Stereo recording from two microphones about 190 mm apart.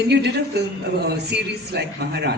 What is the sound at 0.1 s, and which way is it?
A man's voice, 65° right (ahead or behind).